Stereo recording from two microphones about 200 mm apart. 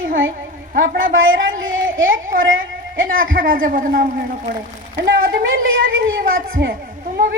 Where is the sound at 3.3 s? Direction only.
45° right (ahead or behind).